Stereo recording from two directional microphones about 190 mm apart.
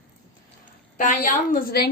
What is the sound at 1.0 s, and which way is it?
Speech, 45° left (ahead or behind).